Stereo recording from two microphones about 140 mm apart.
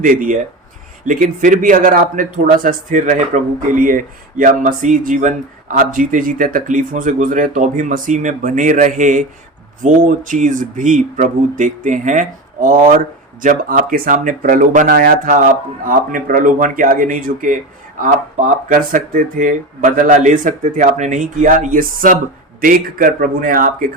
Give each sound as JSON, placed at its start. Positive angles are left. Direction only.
{"t": 0.0, "sound": "speech", "side_deg": -75}